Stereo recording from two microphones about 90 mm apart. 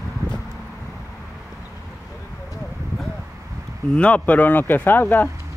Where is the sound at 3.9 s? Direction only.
15° left (ahead or behind).